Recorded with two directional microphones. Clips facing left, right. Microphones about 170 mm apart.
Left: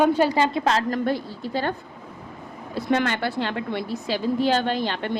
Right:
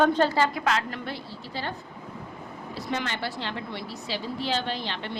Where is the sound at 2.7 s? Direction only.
55° left (ahead or behind).